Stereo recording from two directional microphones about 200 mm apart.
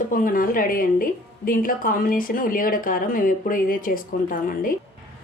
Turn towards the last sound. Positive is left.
turn(degrees=45)  # may be behind; listen again after turning